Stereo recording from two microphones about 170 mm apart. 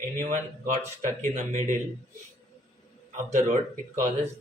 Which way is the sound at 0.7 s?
45° right (ahead or behind).